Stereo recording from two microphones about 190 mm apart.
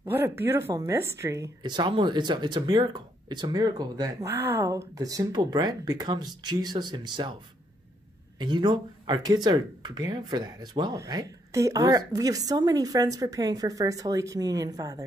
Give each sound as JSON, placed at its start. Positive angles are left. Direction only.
{"t": 0.0, "sound": "speech", "side_deg": -15}
{"t": 8.4, "sound": "speech", "side_deg": -25}